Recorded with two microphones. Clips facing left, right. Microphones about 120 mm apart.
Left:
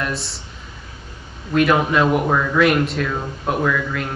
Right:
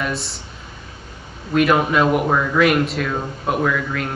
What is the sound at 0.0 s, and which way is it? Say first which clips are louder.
Speech: right 1 dB; centre (ahead or behind).